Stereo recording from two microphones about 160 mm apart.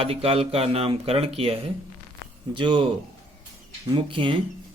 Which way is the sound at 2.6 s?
30° right (ahead or behind).